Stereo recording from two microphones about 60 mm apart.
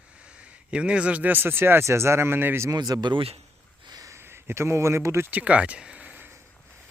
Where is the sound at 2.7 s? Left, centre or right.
Right.